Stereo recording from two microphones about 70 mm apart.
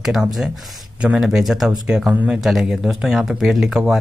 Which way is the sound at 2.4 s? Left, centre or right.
Centre.